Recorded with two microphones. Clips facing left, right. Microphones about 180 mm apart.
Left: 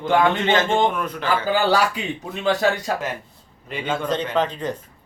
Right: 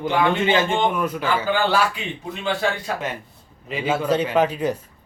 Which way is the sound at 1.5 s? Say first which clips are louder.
Left 2 dB; 40° left (ahead or behind).